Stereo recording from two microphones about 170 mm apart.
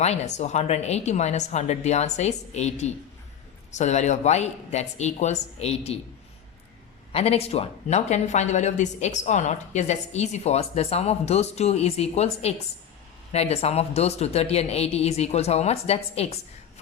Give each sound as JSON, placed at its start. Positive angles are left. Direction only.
{"t": 0.0, "sound": "speech", "side_deg": 40}
{"t": 7.1, "sound": "speech", "side_deg": 35}